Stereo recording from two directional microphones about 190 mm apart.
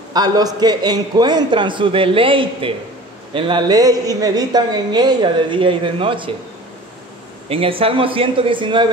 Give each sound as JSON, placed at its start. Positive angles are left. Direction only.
{"t": 0.1, "sound": "a woman's voice", "side_deg": -20}
{"t": 7.4, "sound": "a woman's voice", "side_deg": -30}